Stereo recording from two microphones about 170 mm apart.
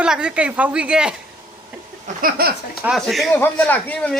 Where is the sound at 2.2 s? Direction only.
65° right (ahead or behind).